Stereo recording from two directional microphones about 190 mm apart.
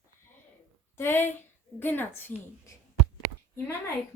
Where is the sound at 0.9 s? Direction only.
10° left (ahead or behind).